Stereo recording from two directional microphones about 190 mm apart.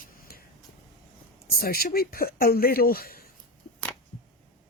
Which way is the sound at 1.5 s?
50° left (ahead or behind).